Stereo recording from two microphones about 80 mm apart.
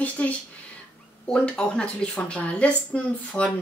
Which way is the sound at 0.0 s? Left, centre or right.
Centre.